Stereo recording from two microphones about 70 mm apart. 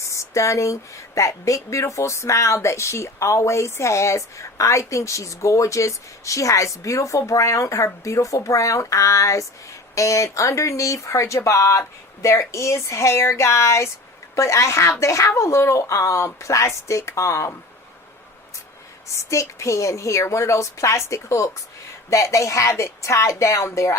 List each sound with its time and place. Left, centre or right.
0.1 s speech: left
19.1 s speech: left